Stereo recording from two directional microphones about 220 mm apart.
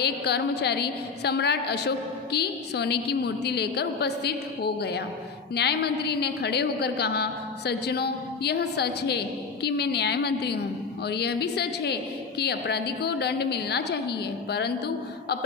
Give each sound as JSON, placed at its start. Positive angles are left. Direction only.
{"t": 0.0, "sound": "a woman's voice", "side_deg": 50}